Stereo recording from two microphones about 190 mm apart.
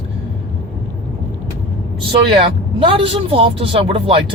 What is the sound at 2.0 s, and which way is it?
A man's voice, 25° right (ahead or behind).